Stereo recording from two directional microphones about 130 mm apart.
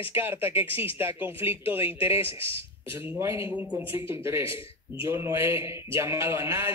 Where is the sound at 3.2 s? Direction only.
20° right (ahead or behind).